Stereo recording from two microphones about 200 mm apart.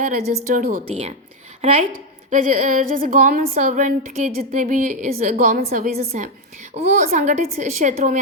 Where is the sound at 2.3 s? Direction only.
40° right (ahead or behind).